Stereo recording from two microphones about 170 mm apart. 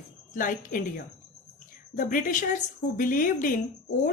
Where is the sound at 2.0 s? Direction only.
55° left (ahead or behind).